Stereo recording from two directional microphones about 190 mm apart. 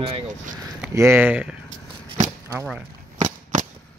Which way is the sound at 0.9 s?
15° right (ahead or behind).